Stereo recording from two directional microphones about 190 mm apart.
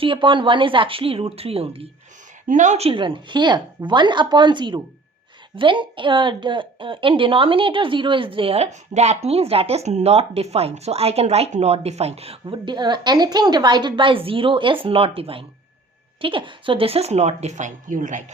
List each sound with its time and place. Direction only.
0.0 s a woman's voice: 25° right (ahead or behind); by 18.2 s 45° right (ahead or behind)